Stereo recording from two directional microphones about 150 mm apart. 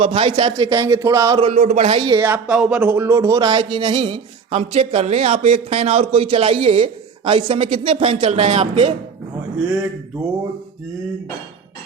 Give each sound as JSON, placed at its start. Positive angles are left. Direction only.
{"t": 0.0, "sound": "speech", "side_deg": -35}
{"t": 1.4, "sound": "speech", "side_deg": -45}
{"t": 2.0, "sound": "speech", "side_deg": -30}
{"t": 2.2, "sound": "speech", "side_deg": -10}